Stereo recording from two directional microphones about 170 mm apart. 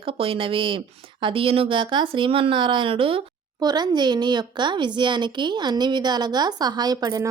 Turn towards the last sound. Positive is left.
turn(degrees=-20)  # may be behind; listen again after turning